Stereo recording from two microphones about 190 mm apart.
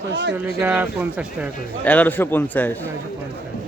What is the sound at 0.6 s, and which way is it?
Speech, 10° right (ahead or behind).